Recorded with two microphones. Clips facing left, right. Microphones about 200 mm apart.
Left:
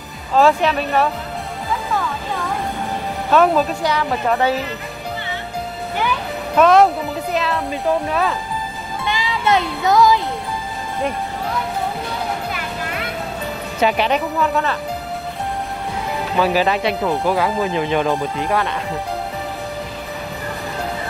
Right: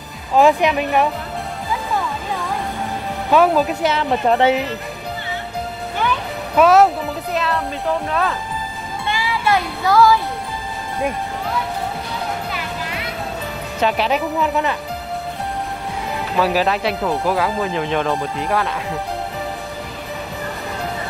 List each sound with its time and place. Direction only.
0.3 s speech: 15° right (ahead or behind)
3.3 s speech: 10° right (ahead or behind)
3.8 s speech: 25° right (ahead or behind)
6.5 s speech: 5° right (ahead or behind)
9.1 s music: 20° left (ahead or behind)
13.7 s speech: centre (ahead or behind)
14.4 s speech: 15° right (ahead or behind)
16.3 s speech: centre (ahead or behind)